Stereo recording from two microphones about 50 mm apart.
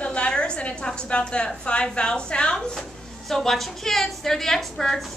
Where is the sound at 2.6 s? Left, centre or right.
Centre.